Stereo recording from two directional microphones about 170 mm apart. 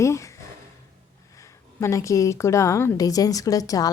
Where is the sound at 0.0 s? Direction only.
15° left (ahead or behind).